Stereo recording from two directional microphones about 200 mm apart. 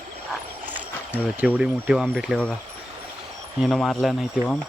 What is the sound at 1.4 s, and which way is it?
Speech, 5° right (ahead or behind).